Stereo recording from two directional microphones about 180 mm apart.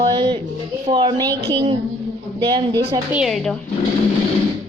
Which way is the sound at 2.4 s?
25° right (ahead or behind).